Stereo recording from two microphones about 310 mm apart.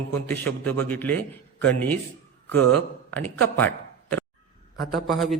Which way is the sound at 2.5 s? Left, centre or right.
Right.